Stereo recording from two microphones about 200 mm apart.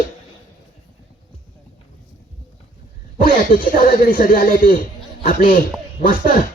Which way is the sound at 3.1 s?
45° left (ahead or behind).